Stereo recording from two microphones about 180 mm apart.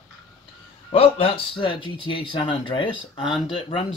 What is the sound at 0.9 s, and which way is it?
Speech, 30° left (ahead or behind).